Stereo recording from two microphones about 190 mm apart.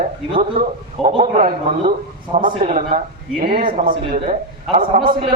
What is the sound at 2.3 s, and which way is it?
Speech, 30° right (ahead or behind).